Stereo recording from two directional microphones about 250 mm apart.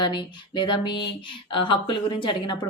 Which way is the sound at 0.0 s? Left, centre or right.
Centre.